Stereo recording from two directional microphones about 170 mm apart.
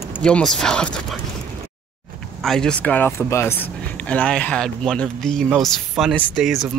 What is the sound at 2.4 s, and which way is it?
Speech, 5° left (ahead or behind).